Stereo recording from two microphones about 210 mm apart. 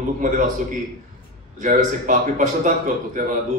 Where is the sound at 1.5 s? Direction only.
35° right (ahead or behind).